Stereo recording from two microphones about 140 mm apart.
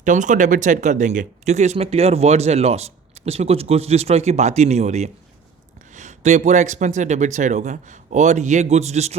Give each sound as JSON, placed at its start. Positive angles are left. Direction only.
{"t": 0.0, "sound": "a man's voice", "side_deg": -65}